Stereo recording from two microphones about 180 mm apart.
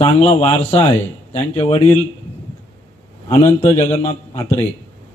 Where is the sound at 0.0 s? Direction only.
35° left (ahead or behind).